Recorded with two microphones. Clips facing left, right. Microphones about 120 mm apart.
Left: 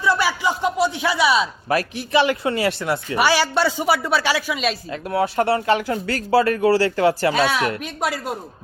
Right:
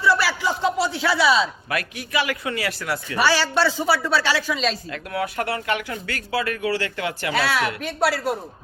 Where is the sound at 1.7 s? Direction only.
30° left (ahead or behind).